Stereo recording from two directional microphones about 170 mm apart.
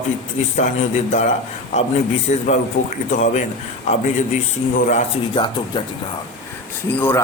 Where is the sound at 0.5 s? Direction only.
45° left (ahead or behind).